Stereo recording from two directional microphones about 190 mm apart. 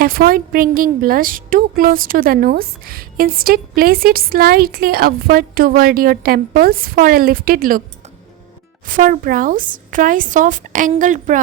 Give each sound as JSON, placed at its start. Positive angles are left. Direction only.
{"t": 0.0, "sound": "a woman's voice", "side_deg": -50}
{"t": 8.9, "sound": "a woman's voice", "side_deg": -45}